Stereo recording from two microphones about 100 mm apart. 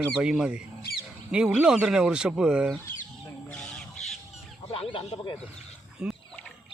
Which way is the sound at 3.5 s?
5° left (ahead or behind).